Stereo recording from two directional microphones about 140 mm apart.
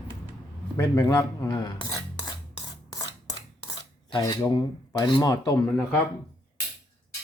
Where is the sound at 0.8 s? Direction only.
20° left (ahead or behind).